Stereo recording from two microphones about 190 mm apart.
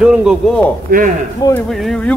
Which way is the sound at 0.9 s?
50° right (ahead or behind).